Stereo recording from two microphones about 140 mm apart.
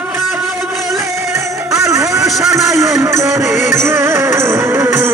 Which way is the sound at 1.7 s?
20° right (ahead or behind).